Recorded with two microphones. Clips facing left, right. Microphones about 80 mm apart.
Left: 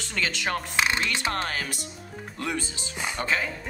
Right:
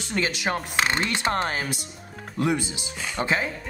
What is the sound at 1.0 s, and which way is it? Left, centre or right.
Speech, right.